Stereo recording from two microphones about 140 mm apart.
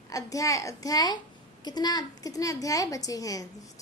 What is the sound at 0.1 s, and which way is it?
A woman's voice, 25° left (ahead or behind).